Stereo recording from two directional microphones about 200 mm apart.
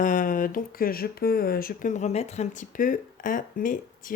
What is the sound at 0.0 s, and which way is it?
Speech, 40° left (ahead or behind).